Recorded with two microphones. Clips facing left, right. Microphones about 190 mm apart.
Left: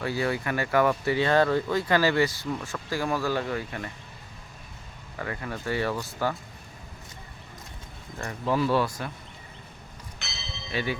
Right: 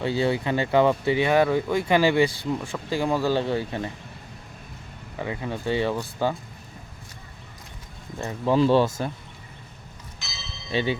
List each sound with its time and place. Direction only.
0.0 s speech: 25° right (ahead or behind)
5.2 s speech: 15° right (ahead or behind)
8.2 s speech: 20° right (ahead or behind)
10.2 s church bell: 65° left (ahead or behind)
10.7 s speech: 25° right (ahead or behind)